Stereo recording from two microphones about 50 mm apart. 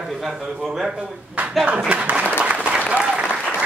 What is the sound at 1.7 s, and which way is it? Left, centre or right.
Speech, right.